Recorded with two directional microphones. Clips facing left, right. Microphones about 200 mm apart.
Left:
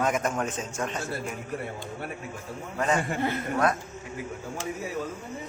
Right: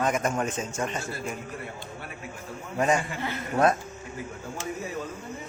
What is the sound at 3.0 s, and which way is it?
Speech, 50° left (ahead or behind).